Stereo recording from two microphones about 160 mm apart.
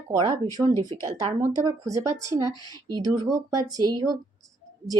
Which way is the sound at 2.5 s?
25° left (ahead or behind).